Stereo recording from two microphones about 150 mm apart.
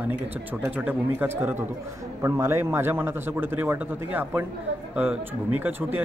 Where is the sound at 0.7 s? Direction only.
10° right (ahead or behind).